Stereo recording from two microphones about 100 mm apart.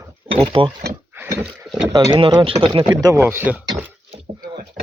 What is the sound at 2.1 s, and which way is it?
Speech, 50° right (ahead or behind).